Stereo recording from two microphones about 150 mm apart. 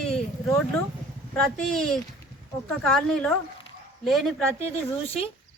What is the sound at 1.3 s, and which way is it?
Speech, 5° left (ahead or behind).